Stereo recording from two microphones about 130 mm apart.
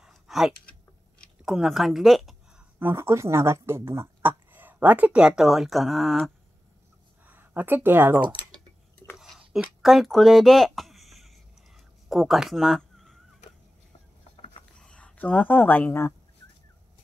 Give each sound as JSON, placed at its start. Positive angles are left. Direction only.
{"t": 0.0, "sound": "a sound", "side_deg": -5}
{"t": 1.4, "sound": "speech", "side_deg": -5}
{"t": 2.8, "sound": "speech", "side_deg": -20}
{"t": 7.2, "sound": "speech", "side_deg": -15}
{"t": 8.2, "sound": "speech", "side_deg": -40}
{"t": 9.1, "sound": "a sound", "side_deg": -5}
{"t": 14.8, "sound": "speech", "side_deg": 5}